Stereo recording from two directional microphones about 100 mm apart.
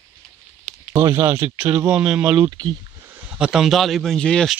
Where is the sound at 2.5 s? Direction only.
45° right (ahead or behind).